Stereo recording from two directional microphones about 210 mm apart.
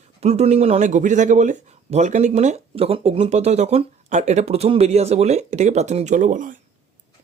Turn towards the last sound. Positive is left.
turn(degrees=-35)  # may be behind; listen again after turning